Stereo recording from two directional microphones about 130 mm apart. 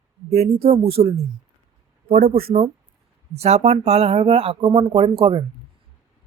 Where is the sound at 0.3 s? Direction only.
55° right (ahead or behind).